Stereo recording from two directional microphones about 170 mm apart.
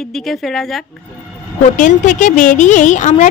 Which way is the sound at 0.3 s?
Centre (ahead or behind).